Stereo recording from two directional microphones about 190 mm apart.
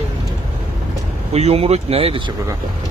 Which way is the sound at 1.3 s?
35° right (ahead or behind).